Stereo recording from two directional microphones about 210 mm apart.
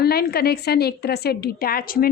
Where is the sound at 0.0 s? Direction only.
50° left (ahead or behind).